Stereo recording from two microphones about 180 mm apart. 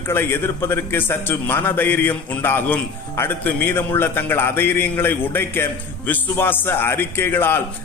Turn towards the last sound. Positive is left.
turn(degrees=10)  # may be behind; listen again after turning